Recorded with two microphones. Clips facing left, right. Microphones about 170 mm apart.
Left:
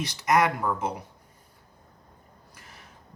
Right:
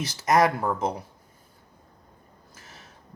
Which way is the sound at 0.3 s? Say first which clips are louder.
Right 2 dB; 35° right (ahead or behind).